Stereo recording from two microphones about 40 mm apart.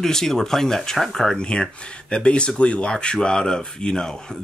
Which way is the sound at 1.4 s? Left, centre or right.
Left.